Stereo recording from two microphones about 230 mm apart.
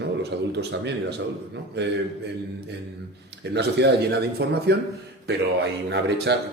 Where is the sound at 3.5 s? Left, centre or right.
Right.